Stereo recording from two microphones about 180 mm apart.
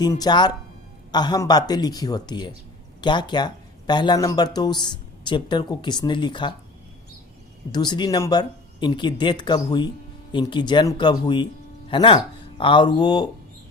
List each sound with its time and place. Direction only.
0.0 s speech: 20° left (ahead or behind)
7.7 s speech: 25° left (ahead or behind)